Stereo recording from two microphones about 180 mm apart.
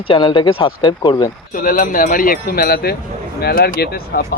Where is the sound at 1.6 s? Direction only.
50° left (ahead or behind).